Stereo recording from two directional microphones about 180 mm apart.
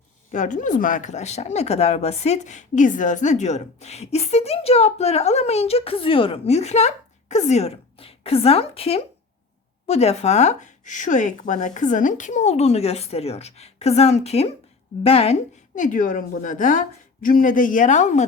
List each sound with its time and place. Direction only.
0.3 s speech: 45° left (ahead or behind)
15.7 s a woman's voice: 45° left (ahead or behind)